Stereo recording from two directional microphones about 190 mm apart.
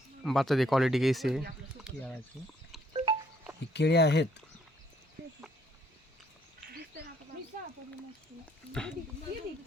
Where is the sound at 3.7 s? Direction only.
60° left (ahead or behind).